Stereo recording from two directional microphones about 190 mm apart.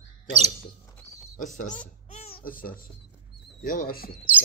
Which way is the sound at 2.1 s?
30° left (ahead or behind).